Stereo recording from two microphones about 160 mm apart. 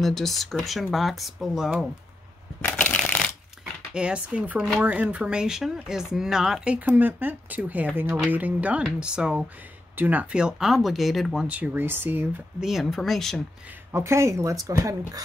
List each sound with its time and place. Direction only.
0.0 s speech: centre (ahead or behind)
2.6 s shuffling cards: 10° left (ahead or behind)
3.9 s speech: 5° right (ahead or behind)
13.9 s speech: 20° right (ahead or behind)